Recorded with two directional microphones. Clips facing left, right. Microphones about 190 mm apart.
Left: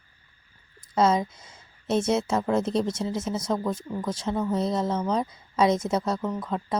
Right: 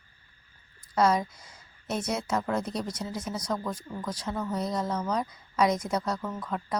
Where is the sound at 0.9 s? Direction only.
25° left (ahead or behind).